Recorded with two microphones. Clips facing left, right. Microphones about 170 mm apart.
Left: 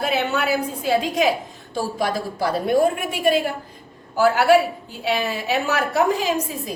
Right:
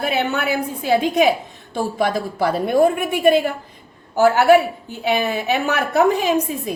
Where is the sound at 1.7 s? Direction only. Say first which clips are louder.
Right 3 dB; 55° right (ahead or behind).